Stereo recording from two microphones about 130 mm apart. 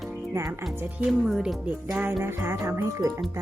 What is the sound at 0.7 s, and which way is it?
Speech, 10° right (ahead or behind).